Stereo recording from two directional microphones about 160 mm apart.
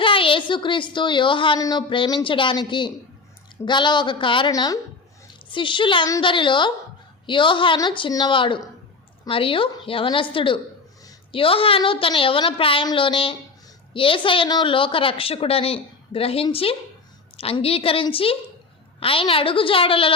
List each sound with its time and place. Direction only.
0.0 s a woman's voice: 35° left (ahead or behind)